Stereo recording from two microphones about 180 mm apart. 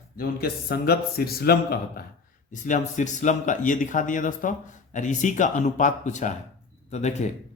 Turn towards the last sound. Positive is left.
turn(degrees=40)  # may be behind; listen again after turning